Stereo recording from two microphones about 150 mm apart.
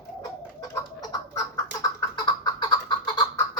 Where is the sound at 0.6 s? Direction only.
25° left (ahead or behind).